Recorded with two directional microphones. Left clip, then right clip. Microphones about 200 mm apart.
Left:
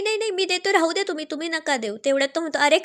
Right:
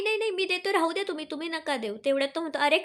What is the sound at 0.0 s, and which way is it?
Speech, 25° left (ahead or behind).